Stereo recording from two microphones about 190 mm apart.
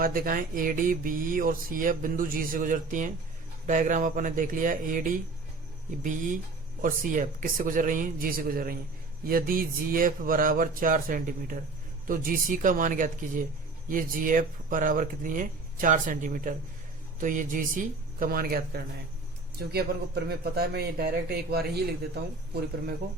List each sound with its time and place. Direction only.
0.0 s a man's voice: 50° right (ahead or behind)